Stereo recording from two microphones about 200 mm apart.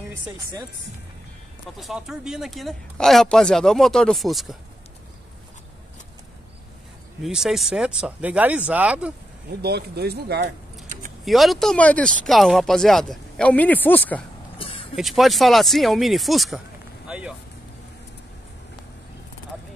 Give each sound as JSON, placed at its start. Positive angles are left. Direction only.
{"t": 0.1, "sound": "speech", "side_deg": -20}
{"t": 1.8, "sound": "speech", "side_deg": 0}
{"t": 7.2, "sound": "speech", "side_deg": 0}
{"t": 9.6, "sound": "speech", "side_deg": -55}
{"t": 11.2, "sound": "speech", "side_deg": 0}
{"t": 14.6, "sound": "vehicle", "side_deg": 25}
{"t": 15.0, "sound": "speech", "side_deg": 0}
{"t": 17.1, "sound": "vehicle", "side_deg": -5}